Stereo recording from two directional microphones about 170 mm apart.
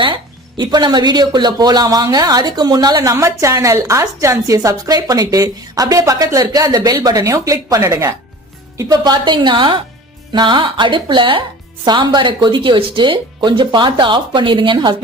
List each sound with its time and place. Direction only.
0.0 s speech: 30° right (ahead or behind)